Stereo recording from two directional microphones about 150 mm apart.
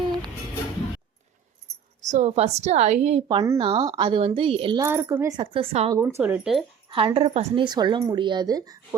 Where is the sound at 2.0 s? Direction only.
50° right (ahead or behind).